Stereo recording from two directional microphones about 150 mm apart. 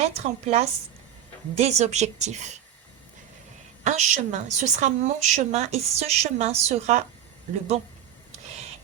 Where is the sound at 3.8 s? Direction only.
50° right (ahead or behind).